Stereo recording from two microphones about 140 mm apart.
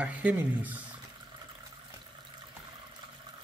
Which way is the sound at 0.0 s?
10° right (ahead or behind).